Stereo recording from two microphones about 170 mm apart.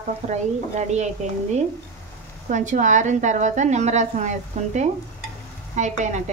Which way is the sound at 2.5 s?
45° right (ahead or behind).